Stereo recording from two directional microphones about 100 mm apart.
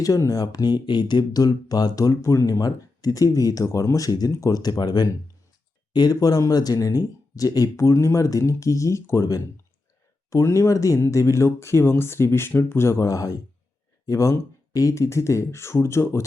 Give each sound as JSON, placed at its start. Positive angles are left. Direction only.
{"t": 0.0, "sound": "speech", "side_deg": 35}